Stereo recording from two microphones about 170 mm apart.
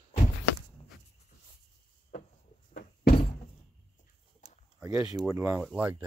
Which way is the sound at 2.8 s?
60° left (ahead or behind).